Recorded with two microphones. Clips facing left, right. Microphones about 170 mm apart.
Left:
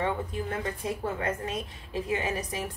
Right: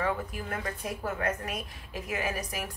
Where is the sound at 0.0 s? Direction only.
25° left (ahead or behind).